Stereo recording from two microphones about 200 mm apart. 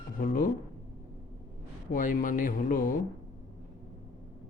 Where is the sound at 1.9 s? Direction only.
45° left (ahead or behind).